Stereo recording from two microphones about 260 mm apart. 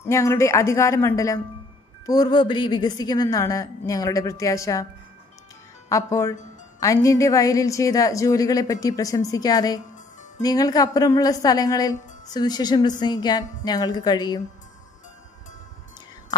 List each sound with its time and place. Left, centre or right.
0.0 s a woman's voice: centre
5.9 s a woman's voice: centre